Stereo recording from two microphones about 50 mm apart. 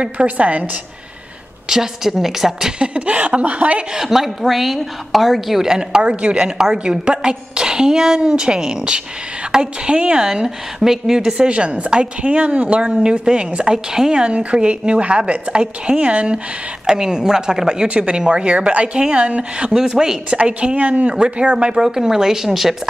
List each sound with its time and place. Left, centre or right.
0.0 s a woman's voice: right
1.7 s a woman's voice: centre
2.8 s a woman's voice: right
3.9 s a woman's voice: centre
19.7 s a woman's voice: centre
21.8 s a woman's voice: centre